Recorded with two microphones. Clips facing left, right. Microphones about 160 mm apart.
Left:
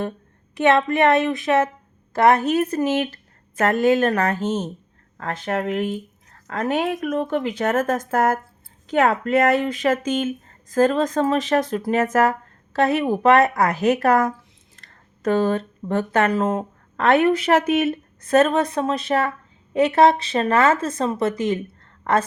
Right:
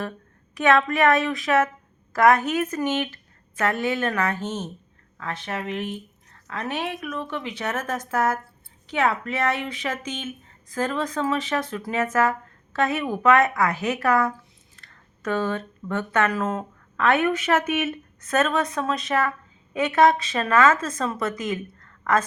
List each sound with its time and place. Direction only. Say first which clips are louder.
0.5 s speech: left 2 dB; 25° left (ahead or behind)